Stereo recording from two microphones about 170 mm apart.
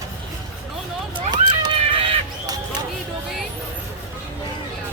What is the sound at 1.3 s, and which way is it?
Horse, 25° right (ahead or behind).